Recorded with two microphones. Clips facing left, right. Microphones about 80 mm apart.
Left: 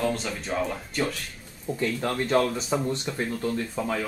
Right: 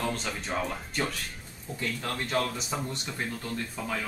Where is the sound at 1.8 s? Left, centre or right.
Left.